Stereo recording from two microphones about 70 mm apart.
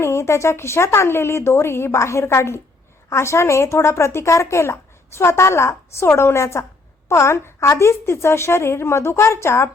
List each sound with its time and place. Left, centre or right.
0.0 s a woman's voice: left